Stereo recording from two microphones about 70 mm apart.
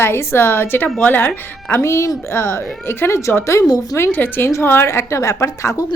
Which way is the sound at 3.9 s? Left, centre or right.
Left.